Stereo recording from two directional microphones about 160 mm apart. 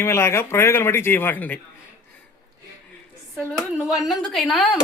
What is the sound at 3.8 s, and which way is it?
Speech, centre (ahead or behind).